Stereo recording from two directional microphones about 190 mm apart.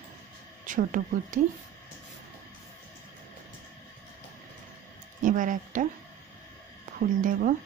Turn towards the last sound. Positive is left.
turn(degrees=-45)  # may be behind; listen again after turning